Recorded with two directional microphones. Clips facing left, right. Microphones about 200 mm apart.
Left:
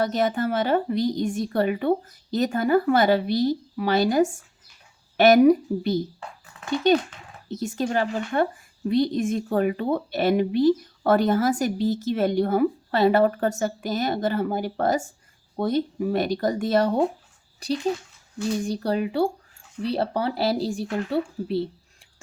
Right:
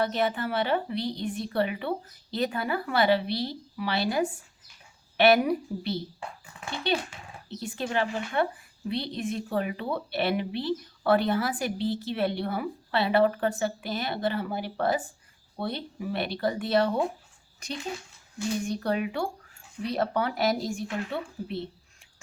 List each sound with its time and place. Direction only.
0.0 s speech: 40° left (ahead or behind)